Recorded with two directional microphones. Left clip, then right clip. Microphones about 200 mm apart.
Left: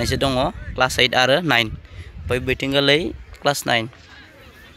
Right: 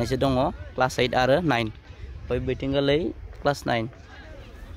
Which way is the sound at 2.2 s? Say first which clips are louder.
Left 6 dB; 15° left (ahead or behind).